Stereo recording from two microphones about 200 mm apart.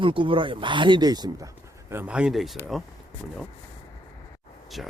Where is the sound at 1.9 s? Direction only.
10° right (ahead or behind).